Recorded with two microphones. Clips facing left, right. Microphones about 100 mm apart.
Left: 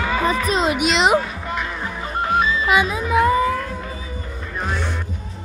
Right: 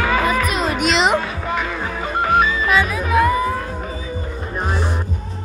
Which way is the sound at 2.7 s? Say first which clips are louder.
Even; 20° left (ahead or behind).